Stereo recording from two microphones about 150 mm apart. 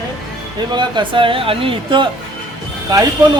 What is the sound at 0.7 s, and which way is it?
Speech, 30° right (ahead or behind).